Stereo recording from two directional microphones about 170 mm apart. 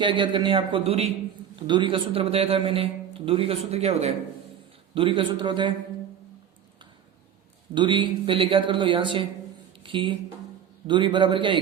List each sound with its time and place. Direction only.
0.0 s a man's voice: 30° right (ahead or behind)
7.7 s speech: 30° right (ahead or behind)